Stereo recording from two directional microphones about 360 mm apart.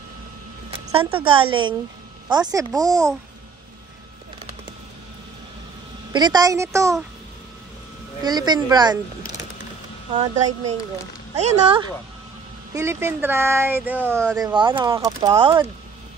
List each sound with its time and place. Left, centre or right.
0.7 s a woman's voice: centre
6.1 s speech: centre
8.2 s speech: centre
11.3 s speech: centre
12.7 s speech: centre